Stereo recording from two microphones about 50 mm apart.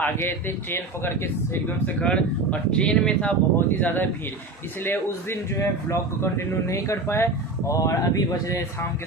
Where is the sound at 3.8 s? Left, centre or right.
Left.